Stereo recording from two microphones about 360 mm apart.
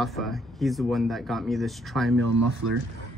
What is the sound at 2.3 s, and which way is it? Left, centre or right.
Speech, right.